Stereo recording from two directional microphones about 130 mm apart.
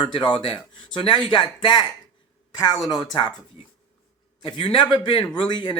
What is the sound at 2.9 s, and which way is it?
Speech, 35° left (ahead or behind).